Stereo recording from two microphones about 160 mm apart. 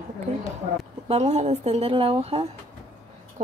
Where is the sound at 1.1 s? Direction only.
40° right (ahead or behind).